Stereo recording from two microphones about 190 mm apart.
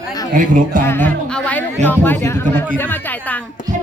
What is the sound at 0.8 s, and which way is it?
Speech, 10° left (ahead or behind).